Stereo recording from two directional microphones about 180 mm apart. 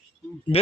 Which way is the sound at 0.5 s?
35° left (ahead or behind).